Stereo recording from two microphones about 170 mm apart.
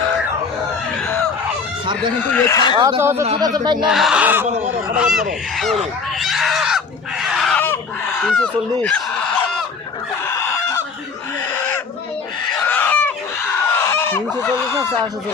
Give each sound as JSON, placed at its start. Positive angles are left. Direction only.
{"t": 2.3, "sound": "speech", "side_deg": 15}
{"t": 2.7, "sound": "speech", "side_deg": -30}
{"t": 3.0, "sound": "speech", "side_deg": -15}
{"t": 3.8, "sound": "speech", "side_deg": -5}
{"t": 4.4, "sound": "speech", "side_deg": -40}
{"t": 4.9, "sound": "speech", "side_deg": -5}
{"t": 6.1, "sound": "a sound", "side_deg": 0}
{"t": 7.6, "sound": "fowl", "side_deg": 10}
{"t": 10.2, "sound": "fowl", "side_deg": 15}
{"t": 12.6, "sound": "fowl", "side_deg": 10}
{"t": 13.4, "sound": "a sound", "side_deg": 15}
{"t": 14.4, "sound": "speech", "side_deg": 15}